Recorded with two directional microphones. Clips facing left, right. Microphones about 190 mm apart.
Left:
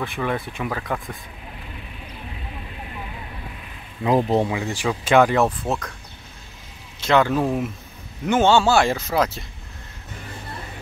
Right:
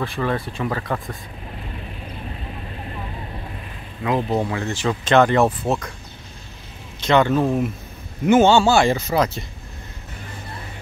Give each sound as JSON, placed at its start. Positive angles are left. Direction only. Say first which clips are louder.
{"t": 0.0, "sound": "speech", "louder": "right 2 dB", "side_deg": 15}
{"t": 0.6, "sound": "speech", "louder": "right 2 dB", "side_deg": 0}
{"t": 4.0, "sound": "speech", "louder": "left 2 dB", "side_deg": 25}
{"t": 4.5, "sound": "speech", "louder": "right 1 dB", "side_deg": 10}
{"t": 7.0, "sound": "speech", "louder": "right 2 dB", "side_deg": 5}